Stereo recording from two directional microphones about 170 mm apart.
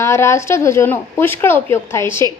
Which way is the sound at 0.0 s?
15° left (ahead or behind).